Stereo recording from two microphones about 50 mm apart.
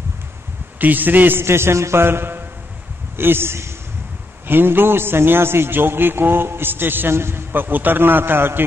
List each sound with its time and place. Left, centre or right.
0.7 s a man's voice: right
1.4 s a man's voice: right
4.5 s a man's voice: right